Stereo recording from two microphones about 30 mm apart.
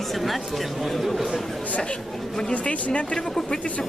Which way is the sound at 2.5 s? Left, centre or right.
Left.